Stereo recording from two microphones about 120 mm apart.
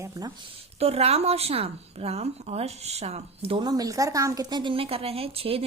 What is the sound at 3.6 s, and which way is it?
A woman's voice, 30° right (ahead or behind).